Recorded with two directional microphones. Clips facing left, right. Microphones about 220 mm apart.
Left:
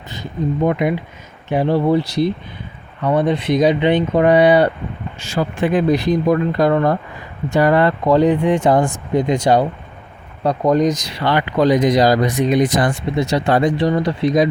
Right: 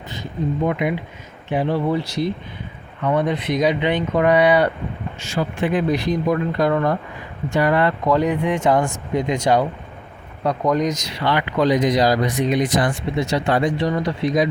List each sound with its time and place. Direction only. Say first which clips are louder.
0.6 s speech: left 5 dB; 40° left (ahead or behind)